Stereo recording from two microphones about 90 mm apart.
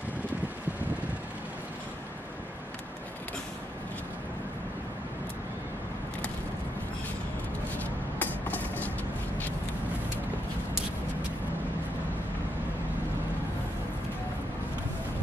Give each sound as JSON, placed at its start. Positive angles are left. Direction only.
{"t": 7.7, "sound": "vehicle", "side_deg": 20}